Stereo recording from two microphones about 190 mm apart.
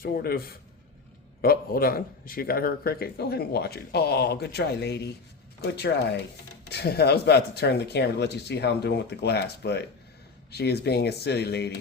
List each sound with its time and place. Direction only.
0.0 s a man's voice: 50° left (ahead or behind)